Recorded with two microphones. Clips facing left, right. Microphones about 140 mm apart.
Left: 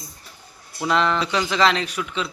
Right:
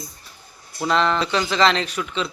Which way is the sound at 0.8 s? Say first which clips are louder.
Right 1 dB; 10° left (ahead or behind).